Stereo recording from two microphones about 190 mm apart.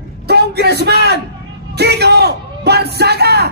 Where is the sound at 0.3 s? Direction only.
60° right (ahead or behind).